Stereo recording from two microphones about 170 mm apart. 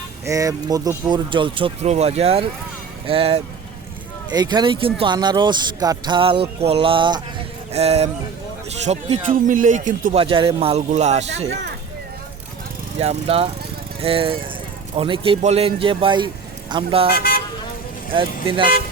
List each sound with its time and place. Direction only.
0.3 s a man's voice: 20° right (ahead or behind); by 3.4 s 35° right (ahead or behind)
4.3 s a man's voice: 25° right (ahead or behind); by 10.2 s 50° right (ahead or behind)
10.2 s a man's voice: 30° right (ahead or behind)
13.0 s a man's voice: 35° right (ahead or behind)
17.2 s speech: 60° left (ahead or behind)
18.1 s a man's voice: 30° right (ahead or behind)